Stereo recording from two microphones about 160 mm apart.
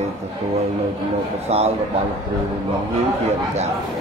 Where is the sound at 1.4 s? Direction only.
40° right (ahead or behind).